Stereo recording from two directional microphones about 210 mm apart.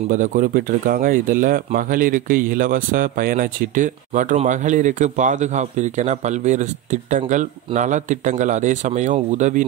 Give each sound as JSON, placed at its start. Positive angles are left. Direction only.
{"t": 0.1, "sound": "speech", "side_deg": -40}